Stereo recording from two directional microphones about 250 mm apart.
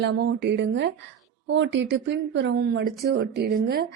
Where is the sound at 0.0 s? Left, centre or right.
Right.